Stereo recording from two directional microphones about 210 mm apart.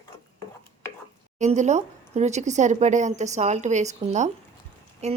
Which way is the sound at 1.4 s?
35° right (ahead or behind).